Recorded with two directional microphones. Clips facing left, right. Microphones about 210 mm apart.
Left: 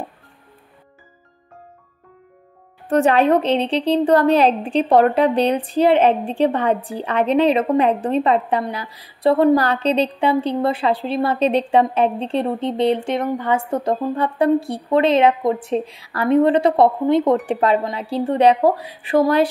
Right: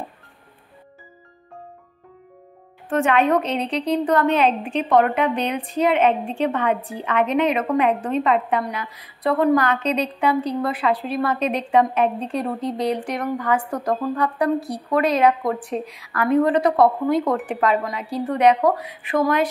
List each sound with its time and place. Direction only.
2.9 s a woman's voice: 35° left (ahead or behind)